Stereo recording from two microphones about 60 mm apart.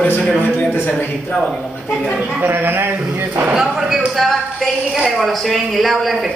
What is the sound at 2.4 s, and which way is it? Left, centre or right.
Speech, right.